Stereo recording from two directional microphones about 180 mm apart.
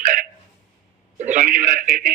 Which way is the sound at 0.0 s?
45° right (ahead or behind).